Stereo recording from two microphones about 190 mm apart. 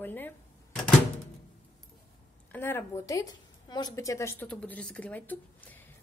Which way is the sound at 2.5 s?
10° left (ahead or behind).